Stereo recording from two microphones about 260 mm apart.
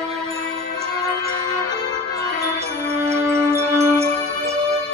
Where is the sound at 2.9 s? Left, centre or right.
Centre.